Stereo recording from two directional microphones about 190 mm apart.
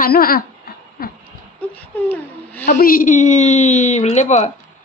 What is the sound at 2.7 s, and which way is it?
A woman's voice, 45° left (ahead or behind).